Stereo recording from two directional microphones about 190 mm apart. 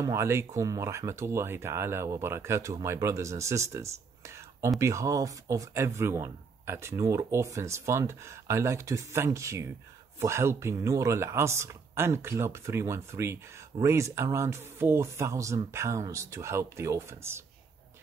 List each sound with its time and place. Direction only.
0.0 s speech: 15° right (ahead or behind)